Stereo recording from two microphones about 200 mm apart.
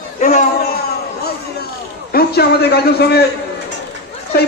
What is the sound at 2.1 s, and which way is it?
A man's voice, 50° left (ahead or behind).